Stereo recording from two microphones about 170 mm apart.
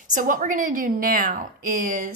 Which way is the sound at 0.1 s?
50° right (ahead or behind).